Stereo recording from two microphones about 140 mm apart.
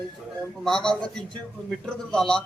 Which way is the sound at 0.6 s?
5° left (ahead or behind).